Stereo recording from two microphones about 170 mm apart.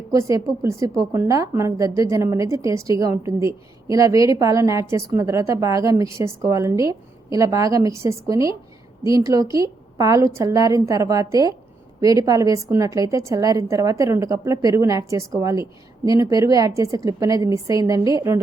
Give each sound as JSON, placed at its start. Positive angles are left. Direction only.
{"t": 0.1, "sound": "a woman's voice", "side_deg": -20}